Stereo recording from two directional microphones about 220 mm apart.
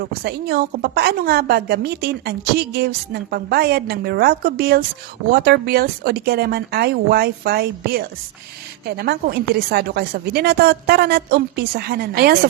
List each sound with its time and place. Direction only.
0.2 s a woman's voice: 45° right (ahead or behind)